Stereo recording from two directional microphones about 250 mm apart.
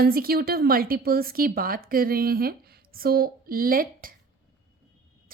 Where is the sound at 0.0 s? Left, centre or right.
Right.